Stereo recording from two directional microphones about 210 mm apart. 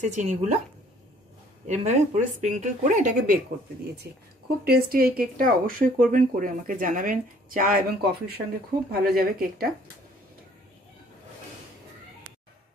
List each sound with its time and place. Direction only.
0.0 s speech: 35° right (ahead or behind)
1.7 s a woman's voice: 35° right (ahead or behind)